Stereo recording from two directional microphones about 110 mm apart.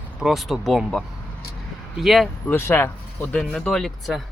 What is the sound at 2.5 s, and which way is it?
Speech, 20° left (ahead or behind).